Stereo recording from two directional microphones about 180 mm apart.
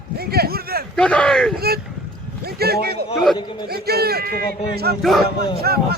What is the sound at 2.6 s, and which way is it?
A man's voice, 60° right (ahead or behind).